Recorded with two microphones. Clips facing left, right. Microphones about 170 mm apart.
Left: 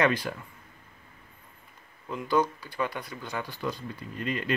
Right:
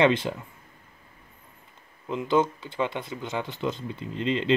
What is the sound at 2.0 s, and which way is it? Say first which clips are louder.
Speech: right 3 dB; 20° right (ahead or behind).